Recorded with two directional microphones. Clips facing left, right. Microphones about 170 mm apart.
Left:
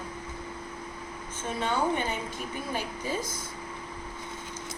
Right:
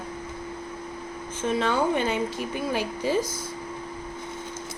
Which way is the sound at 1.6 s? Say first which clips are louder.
Right 3 dB; 90° right.